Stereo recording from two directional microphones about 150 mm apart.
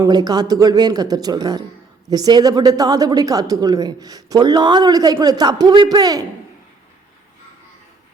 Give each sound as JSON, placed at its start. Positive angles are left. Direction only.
{"t": 0.0, "sound": "a woman's voice", "side_deg": -25}